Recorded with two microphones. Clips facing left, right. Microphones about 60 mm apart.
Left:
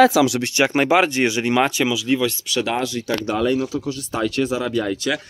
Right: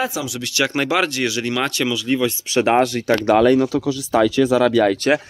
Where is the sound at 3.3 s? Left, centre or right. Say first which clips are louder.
Right 7 dB; right.